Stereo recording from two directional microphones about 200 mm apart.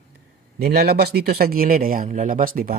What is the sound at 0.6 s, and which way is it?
Speech, 50° right (ahead or behind).